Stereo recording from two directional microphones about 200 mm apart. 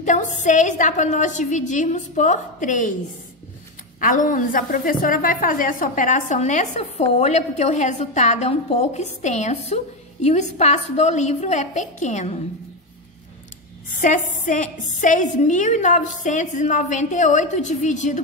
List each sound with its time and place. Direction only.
0.0 s a woman's voice: 40° left (ahead or behind)
4.0 s a woman's voice: 40° left (ahead or behind)
14.0 s a woman's voice: 40° left (ahead or behind)